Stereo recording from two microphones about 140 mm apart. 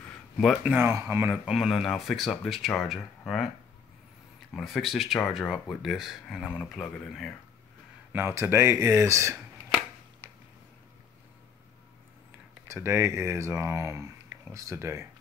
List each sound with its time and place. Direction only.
0.4 s speech: 5° right (ahead or behind)
0.7 s speech: 15° right (ahead or behind)
1.3 s speech: 5° right (ahead or behind)
4.6 s speech: centre (ahead or behind)
8.1 s speech: 15° right (ahead or behind)
12.6 s speech: 20° right (ahead or behind)